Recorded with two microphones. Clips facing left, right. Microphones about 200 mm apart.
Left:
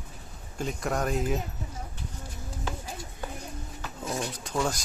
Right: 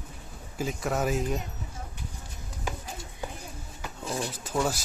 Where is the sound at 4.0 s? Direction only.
5° right (ahead or behind).